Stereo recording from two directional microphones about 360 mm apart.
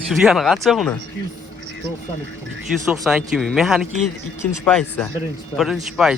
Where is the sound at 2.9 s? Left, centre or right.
Centre.